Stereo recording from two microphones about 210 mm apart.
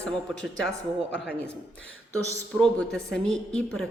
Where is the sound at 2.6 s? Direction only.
5° left (ahead or behind).